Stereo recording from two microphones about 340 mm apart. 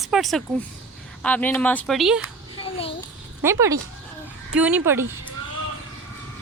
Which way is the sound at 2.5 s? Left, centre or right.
Centre.